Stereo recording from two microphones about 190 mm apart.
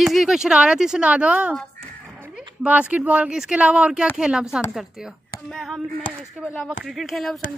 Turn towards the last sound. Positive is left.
turn(degrees=0)  # may be behind; listen again after turning